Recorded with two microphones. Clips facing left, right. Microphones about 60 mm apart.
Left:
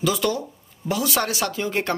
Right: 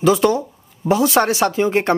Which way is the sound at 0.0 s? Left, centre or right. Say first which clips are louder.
Right 8 dB; right.